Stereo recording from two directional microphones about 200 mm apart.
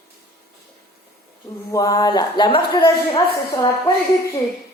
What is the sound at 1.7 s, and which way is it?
A woman's voice, 20° left (ahead or behind).